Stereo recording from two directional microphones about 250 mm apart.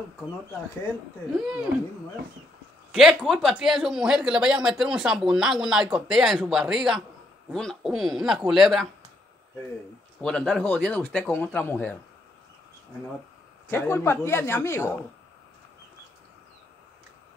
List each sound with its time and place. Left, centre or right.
1.3 s speech: centre
2.9 s speech: centre
10.2 s speech: centre
13.7 s speech: centre